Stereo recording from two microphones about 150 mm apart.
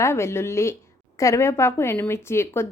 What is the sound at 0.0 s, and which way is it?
A woman's voice, 15° left (ahead or behind).